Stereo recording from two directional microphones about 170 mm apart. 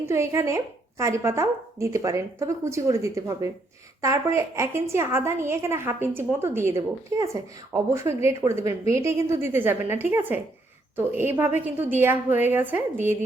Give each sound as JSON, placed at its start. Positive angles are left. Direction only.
{"t": 0.0, "sound": "a woman's voice", "side_deg": -15}